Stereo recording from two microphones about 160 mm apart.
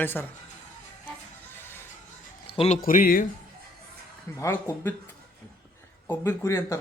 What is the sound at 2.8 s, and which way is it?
Speech, 60° left (ahead or behind).